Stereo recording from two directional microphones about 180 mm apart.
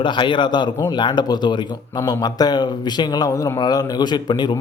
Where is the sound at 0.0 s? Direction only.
25° left (ahead or behind).